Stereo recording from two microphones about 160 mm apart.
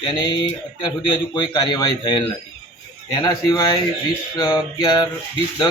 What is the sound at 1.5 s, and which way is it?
Music, 25° left (ahead or behind).